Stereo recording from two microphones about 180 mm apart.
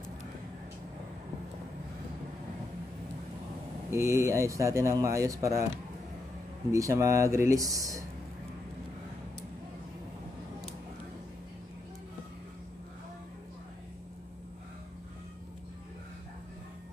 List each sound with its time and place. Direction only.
3.9 s speech: 15° right (ahead or behind)
6.7 s speech: 15° right (ahead or behind)